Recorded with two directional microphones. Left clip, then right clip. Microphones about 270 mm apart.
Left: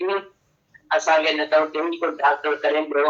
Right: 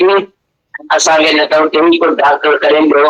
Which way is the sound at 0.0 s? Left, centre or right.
Right.